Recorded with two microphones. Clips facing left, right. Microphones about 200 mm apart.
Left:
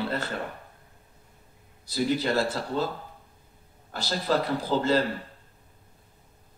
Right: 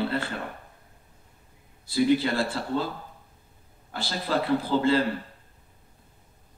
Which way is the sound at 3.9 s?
45° left (ahead or behind).